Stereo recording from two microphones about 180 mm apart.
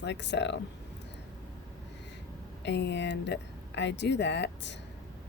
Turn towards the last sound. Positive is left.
turn(degrees=75)  # may be behind; listen again after turning